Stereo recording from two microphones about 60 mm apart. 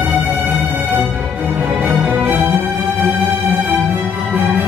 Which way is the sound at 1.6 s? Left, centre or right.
Centre.